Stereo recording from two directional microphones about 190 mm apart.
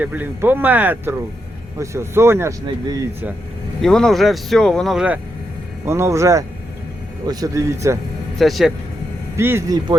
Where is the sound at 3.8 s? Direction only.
5° left (ahead or behind); by 7.9 s 15° right (ahead or behind).